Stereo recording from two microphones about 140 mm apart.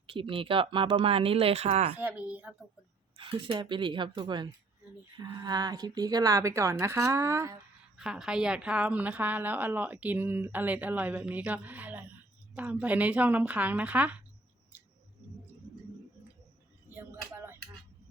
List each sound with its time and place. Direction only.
0.1 s speech: 40° right (ahead or behind)
2.0 s a woman's voice: 10° right (ahead or behind)
3.2 s a woman's voice: 40° right (ahead or behind); by 7.6 s 20° right (ahead or behind)
7.9 s a woman's voice: 5° right (ahead or behind)
16.9 s a sound: 15° right (ahead or behind)